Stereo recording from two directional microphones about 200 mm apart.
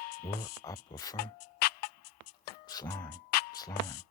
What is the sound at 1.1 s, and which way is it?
Music, 50° left (ahead or behind).